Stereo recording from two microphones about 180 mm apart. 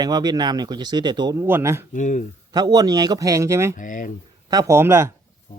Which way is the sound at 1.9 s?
45° left (ahead or behind).